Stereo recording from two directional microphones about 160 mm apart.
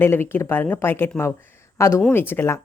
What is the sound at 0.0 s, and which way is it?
Speech, 15° left (ahead or behind).